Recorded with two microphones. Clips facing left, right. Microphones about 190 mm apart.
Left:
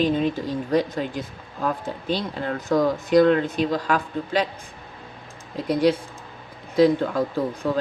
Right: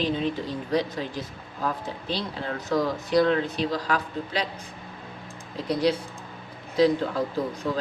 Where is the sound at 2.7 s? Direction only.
50° left (ahead or behind).